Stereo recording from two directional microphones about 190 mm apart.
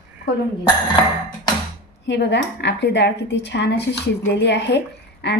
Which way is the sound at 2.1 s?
65° left (ahead or behind).